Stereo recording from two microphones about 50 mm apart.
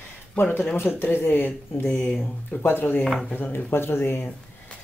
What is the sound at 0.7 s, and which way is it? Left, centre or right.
Speech, left.